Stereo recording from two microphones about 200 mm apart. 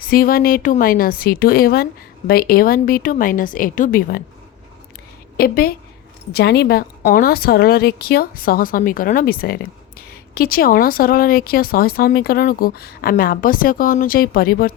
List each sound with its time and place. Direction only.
0.0 s speech: 45° left (ahead or behind)
5.4 s speech: 45° left (ahead or behind)